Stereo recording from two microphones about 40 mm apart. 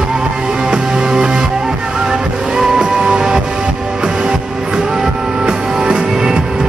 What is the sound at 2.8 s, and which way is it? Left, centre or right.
Music, centre.